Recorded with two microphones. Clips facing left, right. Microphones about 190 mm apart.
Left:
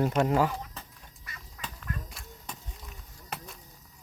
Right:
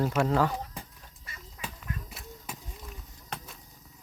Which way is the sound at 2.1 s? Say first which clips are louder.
Right 2 dB; 5° right (ahead or behind).